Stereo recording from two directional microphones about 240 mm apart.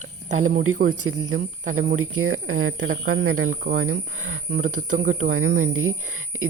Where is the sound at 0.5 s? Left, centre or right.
Right.